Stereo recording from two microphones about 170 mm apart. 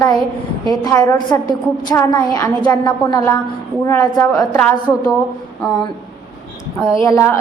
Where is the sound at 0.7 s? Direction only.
20° left (ahead or behind).